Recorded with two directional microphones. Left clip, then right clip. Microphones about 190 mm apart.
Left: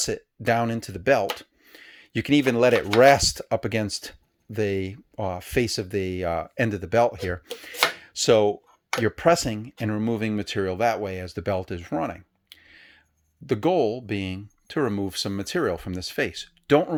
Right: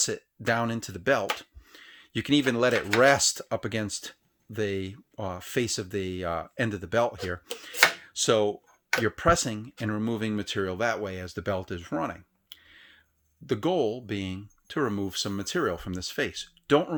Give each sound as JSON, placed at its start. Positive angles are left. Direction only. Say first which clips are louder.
{"t": 0.0, "sound": "speech", "louder": "left 3 dB", "side_deg": 20}
{"t": 1.4, "sound": "a sound", "louder": "left 1 dB", "side_deg": 20}
{"t": 3.0, "sound": "speech", "louder": "left 5 dB", "side_deg": 25}